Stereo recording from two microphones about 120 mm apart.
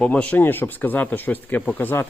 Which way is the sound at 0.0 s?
10° left (ahead or behind).